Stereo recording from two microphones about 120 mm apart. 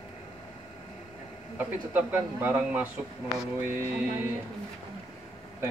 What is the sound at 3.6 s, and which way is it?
Music, 20° right (ahead or behind).